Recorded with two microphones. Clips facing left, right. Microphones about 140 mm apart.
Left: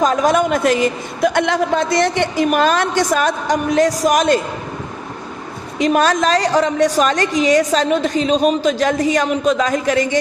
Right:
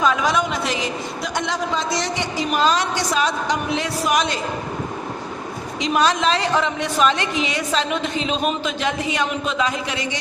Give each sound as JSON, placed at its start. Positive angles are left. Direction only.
{"t": 0.0, "sound": "a man's voice", "side_deg": 40}
{"t": 5.8, "sound": "a woman's voice", "side_deg": 45}